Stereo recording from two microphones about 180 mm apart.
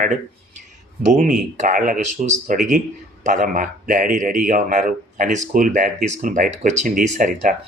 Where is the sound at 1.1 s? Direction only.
45° right (ahead or behind).